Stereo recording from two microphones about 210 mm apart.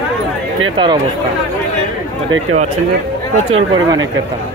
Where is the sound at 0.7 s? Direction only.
20° right (ahead or behind).